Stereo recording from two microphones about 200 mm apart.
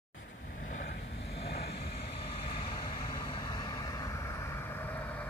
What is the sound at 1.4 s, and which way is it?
Vehicle, 55° left (ahead or behind).